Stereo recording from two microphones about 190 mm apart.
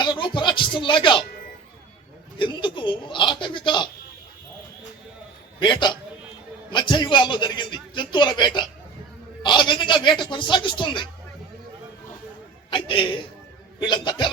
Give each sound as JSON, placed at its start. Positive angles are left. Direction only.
{"t": 0.0, "sound": "speech", "side_deg": 25}
{"t": 2.4, "sound": "a man's voice", "side_deg": 25}
{"t": 5.5, "sound": "a man's voice", "side_deg": 25}
{"t": 12.7, "sound": "a man's voice", "side_deg": 25}